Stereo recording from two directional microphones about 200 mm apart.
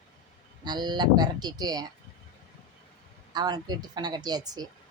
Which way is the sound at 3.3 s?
20° right (ahead or behind).